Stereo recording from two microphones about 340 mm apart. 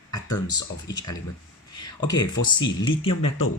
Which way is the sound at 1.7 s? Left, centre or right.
Centre.